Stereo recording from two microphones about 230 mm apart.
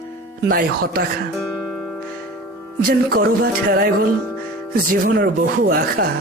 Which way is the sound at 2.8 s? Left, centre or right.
Right.